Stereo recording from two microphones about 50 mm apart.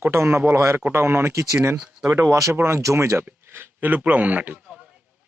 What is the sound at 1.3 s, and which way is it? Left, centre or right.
Speech, right.